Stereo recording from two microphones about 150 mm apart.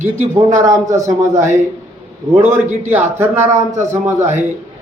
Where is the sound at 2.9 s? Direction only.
15° right (ahead or behind).